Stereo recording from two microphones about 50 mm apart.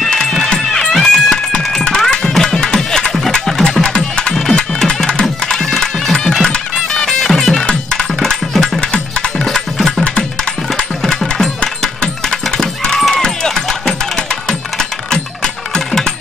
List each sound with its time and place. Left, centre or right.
0.0 s music: centre
0.9 s cat: centre
2.3 s music: centre
8.8 s music: centre
10.7 s a sound: centre
13.1 s music: centre